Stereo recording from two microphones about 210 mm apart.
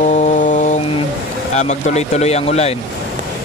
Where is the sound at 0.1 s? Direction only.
35° left (ahead or behind).